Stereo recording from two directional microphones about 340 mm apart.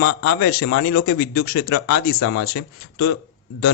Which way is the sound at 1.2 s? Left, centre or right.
Left.